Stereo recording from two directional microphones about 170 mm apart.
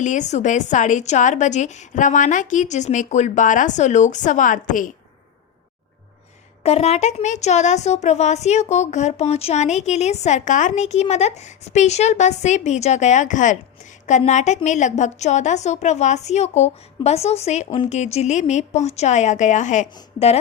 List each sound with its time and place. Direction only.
0.0 s a woman's voice: 45° left (ahead or behind)
6.6 s a woman's voice: 40° left (ahead or behind)